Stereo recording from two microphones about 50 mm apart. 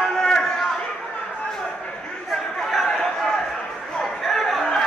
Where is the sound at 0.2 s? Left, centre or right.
Centre.